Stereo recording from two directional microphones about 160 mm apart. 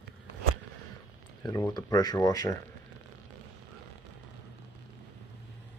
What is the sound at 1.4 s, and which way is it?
Speech, 25° left (ahead or behind).